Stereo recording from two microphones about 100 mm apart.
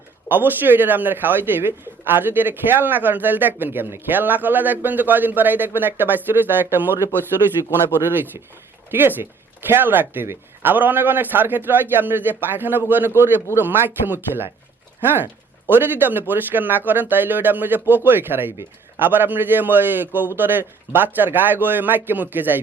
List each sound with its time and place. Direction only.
0.3 s speech: 20° right (ahead or behind)
8.0 s speech: 20° right (ahead or behind)